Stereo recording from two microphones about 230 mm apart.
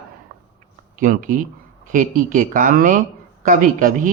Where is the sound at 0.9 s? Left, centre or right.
Right.